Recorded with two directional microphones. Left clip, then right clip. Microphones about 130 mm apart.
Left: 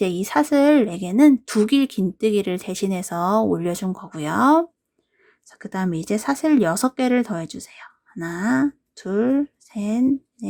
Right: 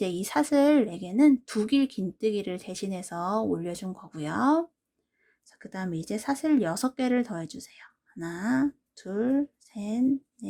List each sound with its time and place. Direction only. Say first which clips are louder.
0.0 s speech: left 7 dB; 25° left (ahead or behind)